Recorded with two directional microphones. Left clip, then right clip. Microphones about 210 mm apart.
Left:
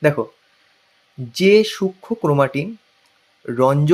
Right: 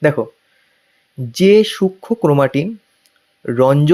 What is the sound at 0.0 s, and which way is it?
Speech, 25° right (ahead or behind).